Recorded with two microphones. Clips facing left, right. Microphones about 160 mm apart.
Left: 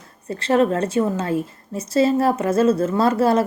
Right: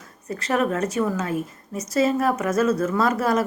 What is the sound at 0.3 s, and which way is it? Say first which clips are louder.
A woman's voice: left 5 dB; 30° left (ahead or behind).